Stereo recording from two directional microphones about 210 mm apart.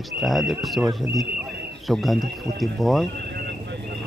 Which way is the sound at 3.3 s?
55° right (ahead or behind).